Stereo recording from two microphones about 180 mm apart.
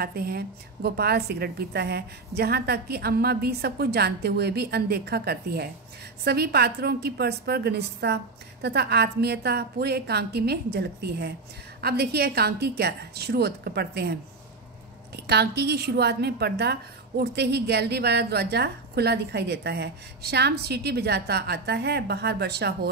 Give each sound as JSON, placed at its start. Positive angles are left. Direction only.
{"t": 0.0, "sound": "a woman's voice", "side_deg": -60}
{"t": 15.1, "sound": "a woman's voice", "side_deg": -65}